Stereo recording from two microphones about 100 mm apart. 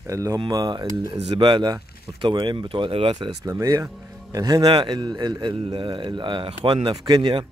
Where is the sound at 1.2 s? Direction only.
55° right (ahead or behind).